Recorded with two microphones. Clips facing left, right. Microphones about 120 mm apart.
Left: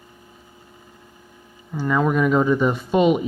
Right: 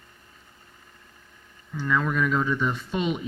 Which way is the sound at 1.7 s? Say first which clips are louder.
Left 6 dB; 15° left (ahead or behind).